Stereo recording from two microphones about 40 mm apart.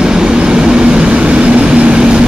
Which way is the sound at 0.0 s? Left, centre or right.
Centre.